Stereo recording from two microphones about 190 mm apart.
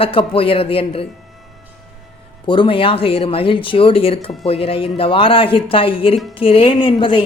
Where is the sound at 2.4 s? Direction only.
25° left (ahead or behind).